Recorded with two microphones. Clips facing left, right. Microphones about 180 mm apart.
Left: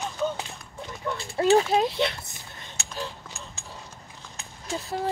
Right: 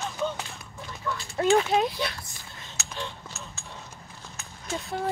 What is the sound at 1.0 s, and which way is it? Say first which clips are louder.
Speech: left 2 dB; 25° left (ahead or behind).